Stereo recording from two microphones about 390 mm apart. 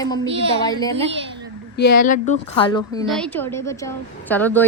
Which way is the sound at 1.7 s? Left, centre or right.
Left.